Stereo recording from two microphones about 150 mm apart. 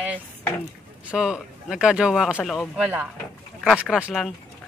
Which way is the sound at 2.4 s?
5° left (ahead or behind).